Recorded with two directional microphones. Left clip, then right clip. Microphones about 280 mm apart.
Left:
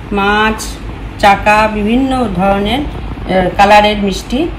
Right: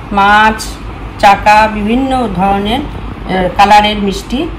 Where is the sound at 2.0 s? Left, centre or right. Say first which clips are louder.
Right 1 dB; right.